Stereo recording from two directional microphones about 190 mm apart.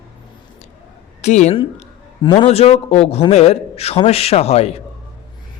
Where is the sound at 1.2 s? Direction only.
35° left (ahead or behind).